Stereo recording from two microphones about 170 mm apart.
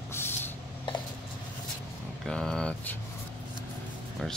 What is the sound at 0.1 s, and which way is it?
Spray, 15° left (ahead or behind).